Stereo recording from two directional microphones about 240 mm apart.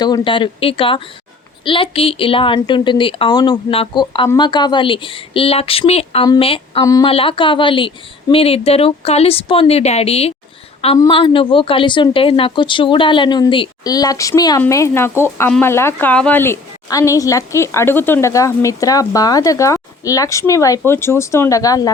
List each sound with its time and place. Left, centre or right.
0.0 s a woman's voice: centre